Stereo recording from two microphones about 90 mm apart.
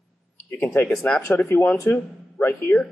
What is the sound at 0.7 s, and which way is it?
Speech, 30° left (ahead or behind).